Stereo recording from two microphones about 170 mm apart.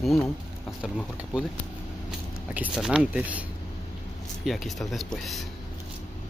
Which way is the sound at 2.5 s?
5° right (ahead or behind).